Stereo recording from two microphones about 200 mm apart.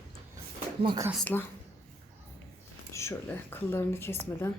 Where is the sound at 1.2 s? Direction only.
10° left (ahead or behind).